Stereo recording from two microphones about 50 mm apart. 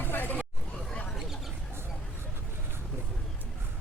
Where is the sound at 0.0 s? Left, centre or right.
Left.